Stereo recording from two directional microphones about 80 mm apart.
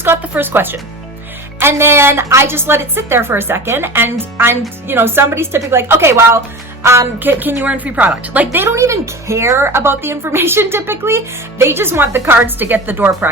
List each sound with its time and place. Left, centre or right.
0.0 s a woman's voice: right
7.2 s a woman's voice: right
8.5 s a woman's voice: right